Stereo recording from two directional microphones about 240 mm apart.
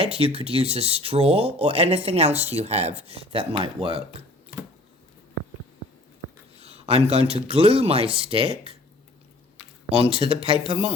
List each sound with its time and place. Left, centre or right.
0.0 s speech: right
6.6 s speech: right
10.2 s speech: right